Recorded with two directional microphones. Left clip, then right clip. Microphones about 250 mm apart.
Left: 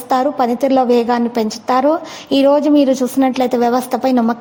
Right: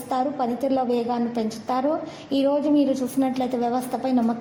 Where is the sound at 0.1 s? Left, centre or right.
Left.